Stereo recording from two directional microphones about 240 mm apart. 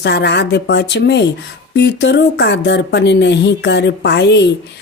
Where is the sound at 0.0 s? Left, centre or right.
Left.